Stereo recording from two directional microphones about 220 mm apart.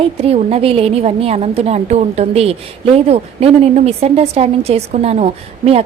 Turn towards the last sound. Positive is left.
turn(degrees=-30)  # may be behind; listen again after turning